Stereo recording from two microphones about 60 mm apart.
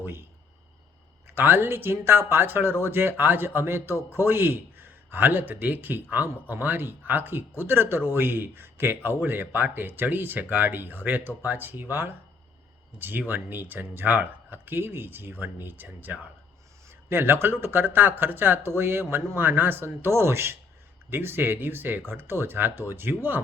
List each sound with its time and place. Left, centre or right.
0.0 s speech: right
1.4 s speech: right